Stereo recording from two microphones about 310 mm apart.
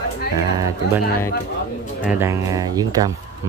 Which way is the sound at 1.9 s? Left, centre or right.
Centre.